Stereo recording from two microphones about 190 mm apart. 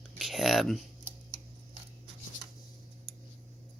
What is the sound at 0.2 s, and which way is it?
Speech, centre (ahead or behind).